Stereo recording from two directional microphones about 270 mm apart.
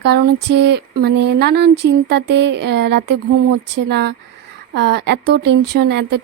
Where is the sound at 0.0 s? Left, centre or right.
Right.